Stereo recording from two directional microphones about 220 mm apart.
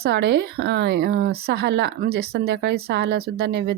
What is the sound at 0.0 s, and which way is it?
Speech, 50° right (ahead or behind).